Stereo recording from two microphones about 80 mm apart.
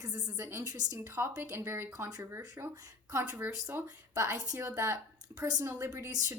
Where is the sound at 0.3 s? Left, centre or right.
Right.